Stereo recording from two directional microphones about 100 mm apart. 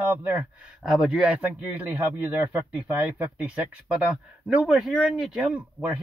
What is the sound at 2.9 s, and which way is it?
Speech, 15° right (ahead or behind).